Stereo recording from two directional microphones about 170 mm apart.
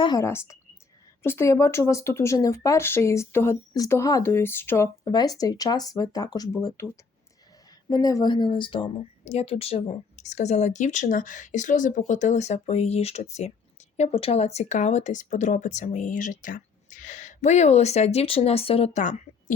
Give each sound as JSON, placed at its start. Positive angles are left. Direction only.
{"t": 0.0, "sound": "speech", "side_deg": 20}